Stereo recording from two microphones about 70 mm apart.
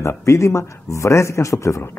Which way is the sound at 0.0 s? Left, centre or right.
Left.